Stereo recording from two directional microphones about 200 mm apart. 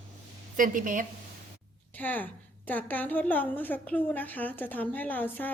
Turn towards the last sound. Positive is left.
turn(degrees=10)  # may be behind; listen again after turning